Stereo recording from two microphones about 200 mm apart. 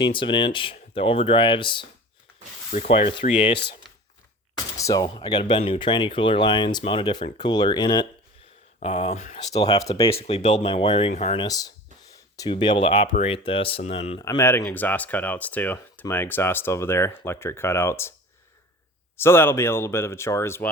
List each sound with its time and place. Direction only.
0.0 s speech: 25° left (ahead or behind)
4.5 s a sound: 15° left (ahead or behind)
5.0 s speech: 25° left (ahead or behind)
8.8 s speech: 30° left (ahead or behind)
9.5 s speech: 20° left (ahead or behind)
11.4 s speech: 20° left (ahead or behind)
14.2 s speech: 15° left (ahead or behind)
19.1 s speech: 10° left (ahead or behind)